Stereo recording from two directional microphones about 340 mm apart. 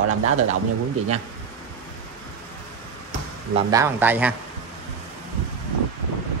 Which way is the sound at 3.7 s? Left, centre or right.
Centre.